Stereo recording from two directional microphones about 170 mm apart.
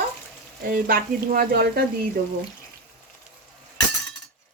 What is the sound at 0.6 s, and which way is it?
Speech, 60° right (ahead or behind).